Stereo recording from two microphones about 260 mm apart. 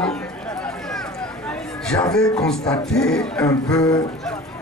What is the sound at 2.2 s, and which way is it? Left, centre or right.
Speech, centre.